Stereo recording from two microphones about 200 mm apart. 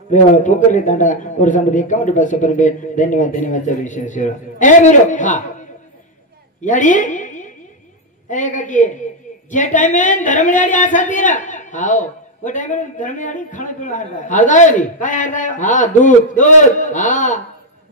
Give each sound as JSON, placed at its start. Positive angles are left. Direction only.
{"t": 0.1, "sound": "speech", "side_deg": 40}
{"t": 6.6, "sound": "a woman's voice", "side_deg": 40}